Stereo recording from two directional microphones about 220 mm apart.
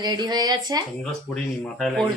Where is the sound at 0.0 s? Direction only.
20° right (ahead or behind).